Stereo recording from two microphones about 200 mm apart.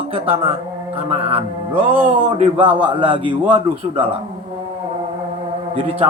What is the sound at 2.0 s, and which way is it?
A man's voice, 30° right (ahead or behind).